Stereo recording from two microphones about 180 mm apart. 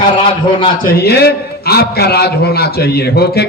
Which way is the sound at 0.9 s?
60° left (ahead or behind).